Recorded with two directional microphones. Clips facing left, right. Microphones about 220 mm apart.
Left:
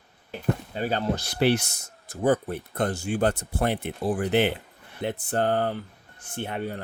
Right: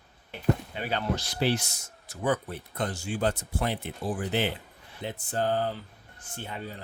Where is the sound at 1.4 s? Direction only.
65° left (ahead or behind).